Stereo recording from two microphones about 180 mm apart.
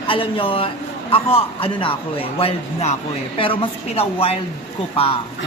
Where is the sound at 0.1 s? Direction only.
30° left (ahead or behind).